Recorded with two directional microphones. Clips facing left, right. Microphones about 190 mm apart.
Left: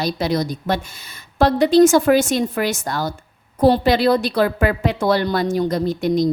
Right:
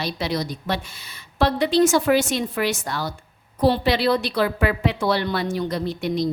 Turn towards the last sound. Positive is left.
turn(degrees=45)  # may be behind; listen again after turning